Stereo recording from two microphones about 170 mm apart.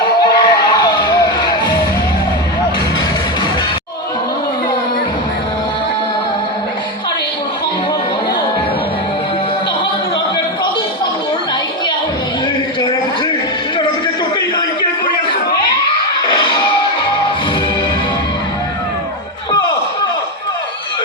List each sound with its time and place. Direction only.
0.0 s music: 25° left (ahead or behind)
16.3 s music: 25° left (ahead or behind)